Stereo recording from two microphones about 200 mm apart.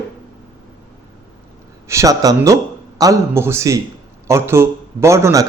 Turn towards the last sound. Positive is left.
turn(degrees=-15)  # may be behind; listen again after turning